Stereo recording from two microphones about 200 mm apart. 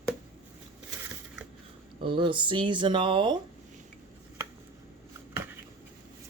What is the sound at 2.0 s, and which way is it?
Speech, 25° right (ahead or behind).